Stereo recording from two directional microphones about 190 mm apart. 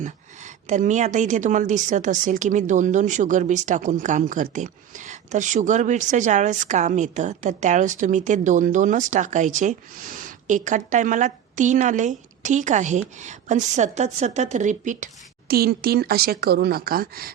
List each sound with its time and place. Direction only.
0.0 s a woman's voice: 40° right (ahead or behind)